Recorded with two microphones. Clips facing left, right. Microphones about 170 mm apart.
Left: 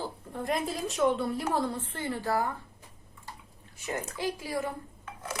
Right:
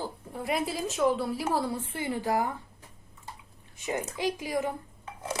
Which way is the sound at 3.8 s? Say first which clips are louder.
Right 3 dB; 15° right (ahead or behind).